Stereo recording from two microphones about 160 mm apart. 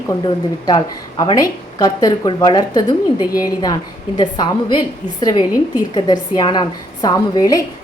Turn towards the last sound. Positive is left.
turn(degrees=20)  # may be behind; listen again after turning